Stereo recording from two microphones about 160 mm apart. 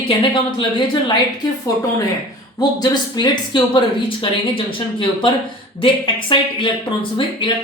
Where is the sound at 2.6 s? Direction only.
25° left (ahead or behind).